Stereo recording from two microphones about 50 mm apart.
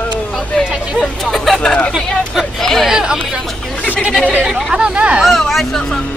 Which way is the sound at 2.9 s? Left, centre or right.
Centre.